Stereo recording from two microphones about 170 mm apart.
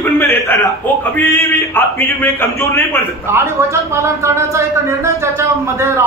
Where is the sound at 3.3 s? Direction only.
15° right (ahead or behind).